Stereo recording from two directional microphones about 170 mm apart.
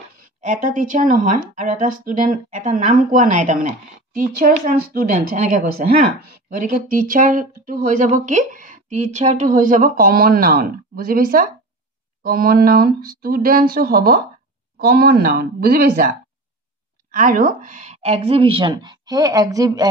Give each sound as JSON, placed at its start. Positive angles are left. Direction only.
{"t": 0.2, "sound": "speech", "side_deg": -45}
{"t": 17.1, "sound": "a woman's voice", "side_deg": -55}